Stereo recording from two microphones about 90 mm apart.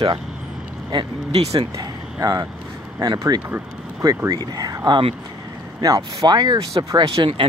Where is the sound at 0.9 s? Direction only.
90° right.